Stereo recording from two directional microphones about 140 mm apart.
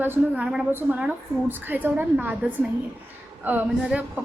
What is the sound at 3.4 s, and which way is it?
Speech, 10° right (ahead or behind).